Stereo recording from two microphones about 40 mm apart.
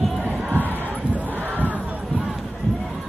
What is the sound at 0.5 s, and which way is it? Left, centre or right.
Battle cry, right.